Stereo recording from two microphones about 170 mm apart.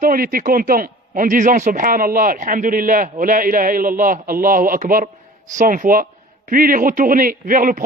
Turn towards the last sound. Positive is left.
turn(degrees=-55)  # may be behind; listen again after turning